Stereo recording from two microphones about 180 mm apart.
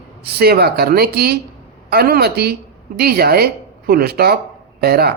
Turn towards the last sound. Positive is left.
turn(degrees=-60)  # may be behind; listen again after turning